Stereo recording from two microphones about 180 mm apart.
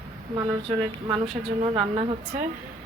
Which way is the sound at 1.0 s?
30° right (ahead or behind).